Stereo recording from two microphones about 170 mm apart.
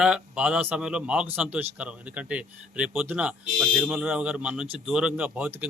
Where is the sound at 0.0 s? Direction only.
5° right (ahead or behind).